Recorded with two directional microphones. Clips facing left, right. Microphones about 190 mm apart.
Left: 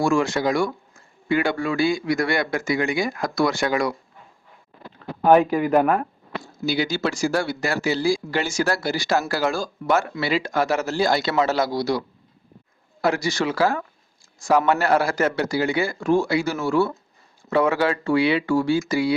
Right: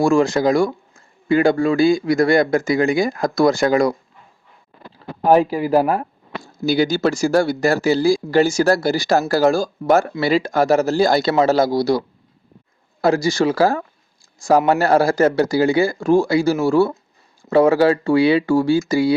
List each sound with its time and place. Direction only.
0.0 s speech: 35° right (ahead or behind)
5.3 s speech: 35° right (ahead or behind)